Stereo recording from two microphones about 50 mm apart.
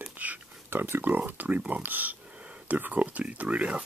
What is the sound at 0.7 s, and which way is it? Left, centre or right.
Speech, right.